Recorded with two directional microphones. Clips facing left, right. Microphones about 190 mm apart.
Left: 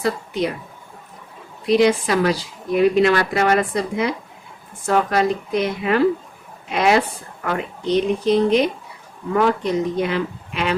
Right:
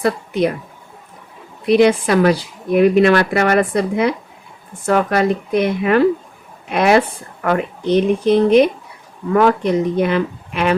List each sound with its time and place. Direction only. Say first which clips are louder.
0.0 s a woman's voice: right 5 dB; 55° right (ahead or behind)
1.6 s speech: right 3 dB; 60° right (ahead or behind)